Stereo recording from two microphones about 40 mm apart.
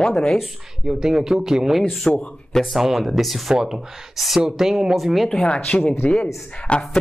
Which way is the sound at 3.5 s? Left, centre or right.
Centre.